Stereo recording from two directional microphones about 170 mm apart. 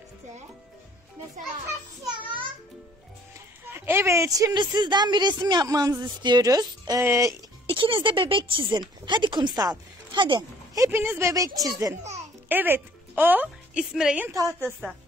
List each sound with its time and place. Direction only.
3.7 s a woman's voice: 15° right (ahead or behind)
7.6 s a woman's voice: 30° right (ahead or behind); by 14.3 s 5° right (ahead or behind)
14.3 s a woman's voice: 20° right (ahead or behind)